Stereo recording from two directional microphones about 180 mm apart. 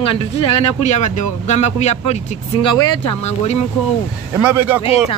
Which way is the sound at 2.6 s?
20° left (ahead or behind).